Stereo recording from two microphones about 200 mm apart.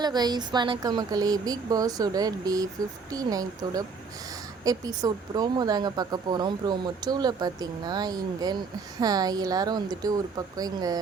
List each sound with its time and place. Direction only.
0.0 s speech: 20° right (ahead or behind)